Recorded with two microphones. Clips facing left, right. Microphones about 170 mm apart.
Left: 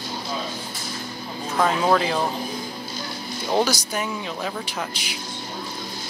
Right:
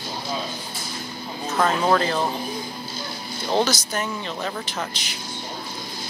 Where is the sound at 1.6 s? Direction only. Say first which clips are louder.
Even; 5° left (ahead or behind).